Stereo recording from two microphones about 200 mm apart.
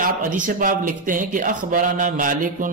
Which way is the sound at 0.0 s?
45° right (ahead or behind).